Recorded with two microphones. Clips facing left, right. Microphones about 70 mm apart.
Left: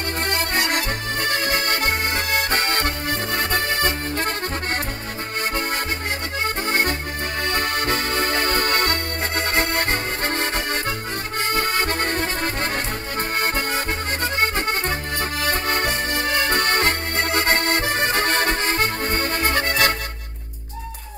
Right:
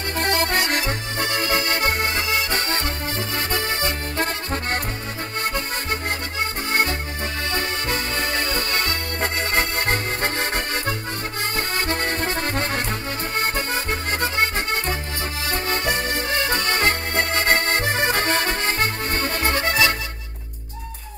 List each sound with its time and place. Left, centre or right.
0.2 s accordion: right
0.7 s accordion: left
6.7 s accordion: left
13.4 s music: left
15.4 s accordion: left
16.1 s music: left
17.3 s accordion: left
19.5 s music: left